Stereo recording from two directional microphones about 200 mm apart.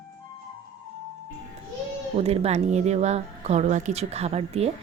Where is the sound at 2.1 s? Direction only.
30° right (ahead or behind).